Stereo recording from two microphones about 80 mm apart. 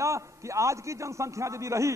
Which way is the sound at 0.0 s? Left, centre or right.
Right.